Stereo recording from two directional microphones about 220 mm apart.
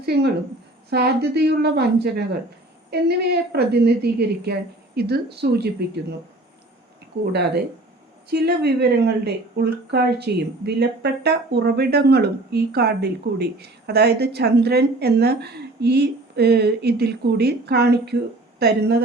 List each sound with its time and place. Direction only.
0.0 s a woman's voice: 45° right (ahead or behind)
8.3 s speech: 45° right (ahead or behind)